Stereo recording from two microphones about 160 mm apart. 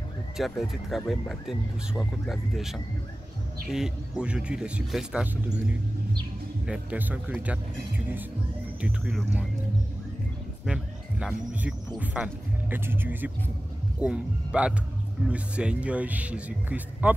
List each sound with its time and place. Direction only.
0.4 s speech: centre (ahead or behind)
6.6 s speech: 5° right (ahead or behind)
8.8 s speech: 5° right (ahead or behind)
10.6 s speech: 5° right (ahead or behind)